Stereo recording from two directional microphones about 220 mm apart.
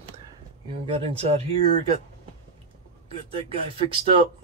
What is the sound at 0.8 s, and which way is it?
Speech, 25° right (ahead or behind).